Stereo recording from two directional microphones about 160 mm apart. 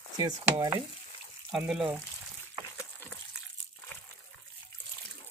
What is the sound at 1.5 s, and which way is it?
Speech, 5° right (ahead or behind).